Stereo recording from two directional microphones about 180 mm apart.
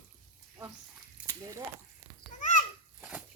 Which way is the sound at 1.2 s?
20° right (ahead or behind).